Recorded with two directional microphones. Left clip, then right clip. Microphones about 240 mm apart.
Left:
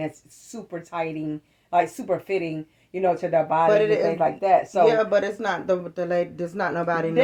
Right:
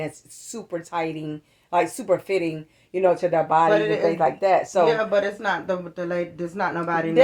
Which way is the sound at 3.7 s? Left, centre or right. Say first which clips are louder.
Left 1 dB; left.